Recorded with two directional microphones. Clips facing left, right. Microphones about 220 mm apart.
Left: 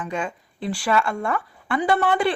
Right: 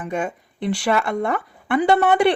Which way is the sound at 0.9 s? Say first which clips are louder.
Right 1 dB; 20° right (ahead or behind).